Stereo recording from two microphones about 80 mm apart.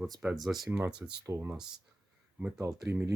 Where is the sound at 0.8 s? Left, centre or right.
Right.